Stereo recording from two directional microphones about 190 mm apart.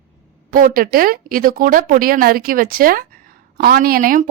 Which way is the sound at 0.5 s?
50° right (ahead or behind).